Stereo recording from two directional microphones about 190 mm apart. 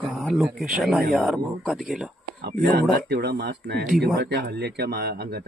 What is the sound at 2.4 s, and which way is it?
Speech, 55° right (ahead or behind).